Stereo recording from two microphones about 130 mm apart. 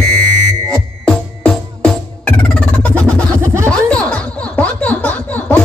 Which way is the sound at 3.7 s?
5° left (ahead or behind).